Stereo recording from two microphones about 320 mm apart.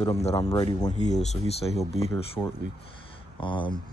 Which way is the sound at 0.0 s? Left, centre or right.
Centre.